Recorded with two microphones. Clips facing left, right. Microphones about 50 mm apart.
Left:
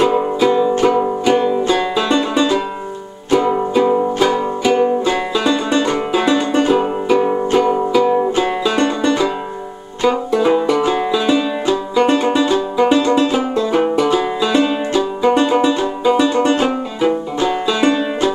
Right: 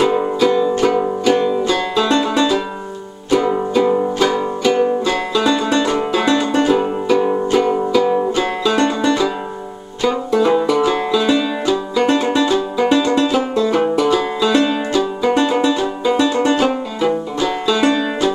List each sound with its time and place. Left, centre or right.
0.0 s music: centre
10.0 s banjo: centre
10.9 s music: centre
15.7 s music: centre